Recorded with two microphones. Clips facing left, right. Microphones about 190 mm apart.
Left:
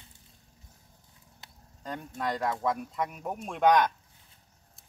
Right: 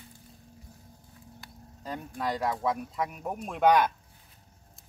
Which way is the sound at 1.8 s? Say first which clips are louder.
Right 1 dB; 5° right (ahead or behind).